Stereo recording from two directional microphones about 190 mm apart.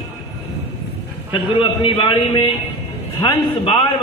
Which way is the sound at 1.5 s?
25° left (ahead or behind).